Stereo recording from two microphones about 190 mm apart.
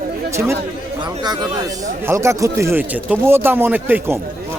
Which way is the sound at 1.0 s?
20° right (ahead or behind).